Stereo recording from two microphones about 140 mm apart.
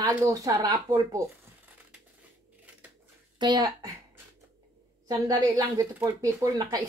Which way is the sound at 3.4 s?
30° right (ahead or behind).